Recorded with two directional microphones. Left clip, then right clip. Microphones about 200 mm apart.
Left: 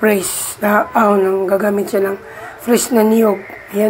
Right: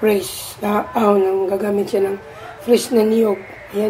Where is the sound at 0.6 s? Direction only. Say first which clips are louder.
Left 6 dB; 10° left (ahead or behind).